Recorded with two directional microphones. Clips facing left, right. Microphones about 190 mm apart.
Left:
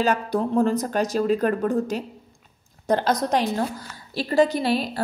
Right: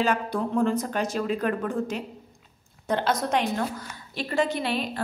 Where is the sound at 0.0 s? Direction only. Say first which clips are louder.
Left 3 dB; 40° left (ahead or behind).